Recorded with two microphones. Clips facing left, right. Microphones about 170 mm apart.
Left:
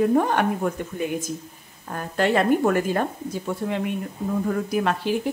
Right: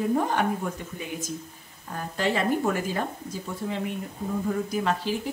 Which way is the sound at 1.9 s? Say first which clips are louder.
Left 5 dB; 60° left (ahead or behind).